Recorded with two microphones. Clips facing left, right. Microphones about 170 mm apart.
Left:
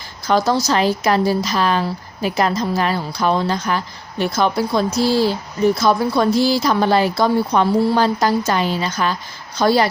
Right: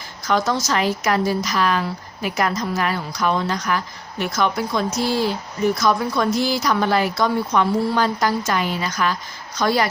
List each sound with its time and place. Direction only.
0.3 s a woman's voice: 35° left (ahead or behind)